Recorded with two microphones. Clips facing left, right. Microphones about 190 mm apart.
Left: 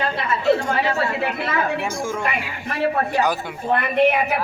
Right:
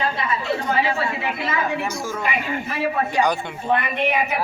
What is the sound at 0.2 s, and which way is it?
Speech, 60° left (ahead or behind).